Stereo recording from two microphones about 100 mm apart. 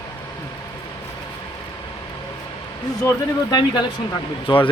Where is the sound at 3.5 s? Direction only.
45° left (ahead or behind).